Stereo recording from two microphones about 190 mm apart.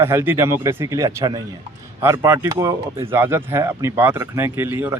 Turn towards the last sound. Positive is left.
turn(degrees=-10)  # may be behind; listen again after turning